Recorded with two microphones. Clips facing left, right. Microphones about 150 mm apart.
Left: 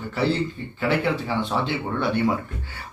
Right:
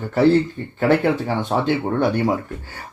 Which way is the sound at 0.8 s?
50° right (ahead or behind).